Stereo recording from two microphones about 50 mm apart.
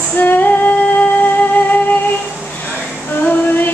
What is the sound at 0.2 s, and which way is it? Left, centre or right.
Female singing, left.